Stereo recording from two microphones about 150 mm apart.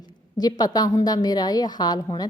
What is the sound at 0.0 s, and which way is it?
A woman's voice, 25° left (ahead or behind).